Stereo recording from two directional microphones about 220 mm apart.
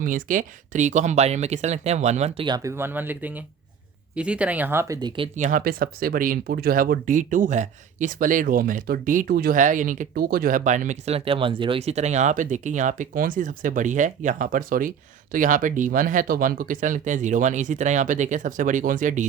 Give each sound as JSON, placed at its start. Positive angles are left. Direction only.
{"t": 0.0, "sound": "speech", "side_deg": -40}
{"t": 5.5, "sound": "speech", "side_deg": -40}